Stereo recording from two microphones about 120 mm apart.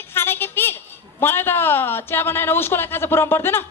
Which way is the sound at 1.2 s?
20° left (ahead or behind).